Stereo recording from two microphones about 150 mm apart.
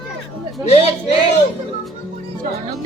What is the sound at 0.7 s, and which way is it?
Speech, 45° left (ahead or behind).